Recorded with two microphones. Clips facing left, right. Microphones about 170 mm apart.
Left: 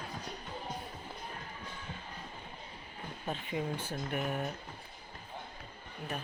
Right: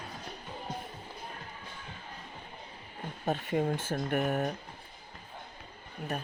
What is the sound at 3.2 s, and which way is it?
Speech, 45° right (ahead or behind).